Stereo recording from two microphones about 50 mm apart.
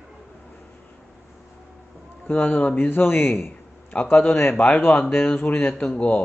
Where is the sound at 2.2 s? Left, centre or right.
Left.